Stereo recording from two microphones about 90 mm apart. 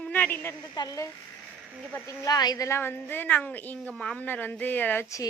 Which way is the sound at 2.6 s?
30° left (ahead or behind).